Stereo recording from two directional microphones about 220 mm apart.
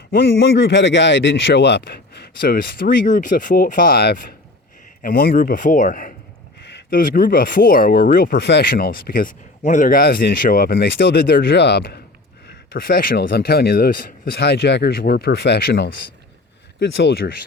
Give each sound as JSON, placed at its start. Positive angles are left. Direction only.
{"t": 0.1, "sound": "speech", "side_deg": 50}
{"t": 17.0, "sound": "speech", "side_deg": 50}